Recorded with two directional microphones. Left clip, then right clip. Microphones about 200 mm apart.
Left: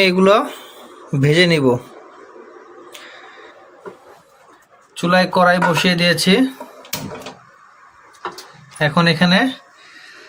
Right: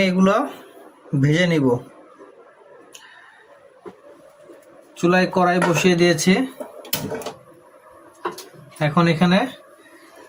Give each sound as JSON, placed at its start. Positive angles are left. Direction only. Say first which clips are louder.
{"t": 0.0, "sound": "speech", "louder": "left 6 dB", "side_deg": 15}
{"t": 4.9, "sound": "speech", "louder": "left 3 dB", "side_deg": 10}
{"t": 8.8, "sound": "speech", "louder": "left 4 dB", "side_deg": 15}